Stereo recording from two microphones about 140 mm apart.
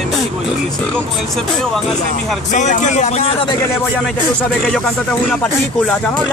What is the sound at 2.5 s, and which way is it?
Speech, 60° left (ahead or behind).